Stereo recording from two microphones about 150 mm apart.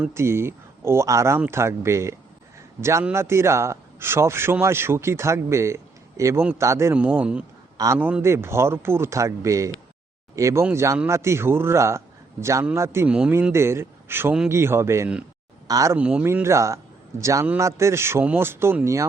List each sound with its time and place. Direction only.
0.1 s a man's voice: 15° right (ahead or behind)
16.0 s a man's voice: 10° right (ahead or behind)